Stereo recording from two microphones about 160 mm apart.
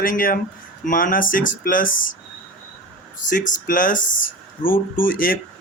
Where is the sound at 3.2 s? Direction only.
55° left (ahead or behind).